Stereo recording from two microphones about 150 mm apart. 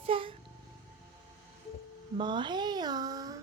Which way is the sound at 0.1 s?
35° right (ahead or behind).